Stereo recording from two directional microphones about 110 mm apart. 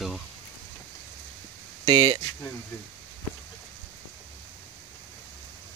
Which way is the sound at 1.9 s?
55° right (ahead or behind).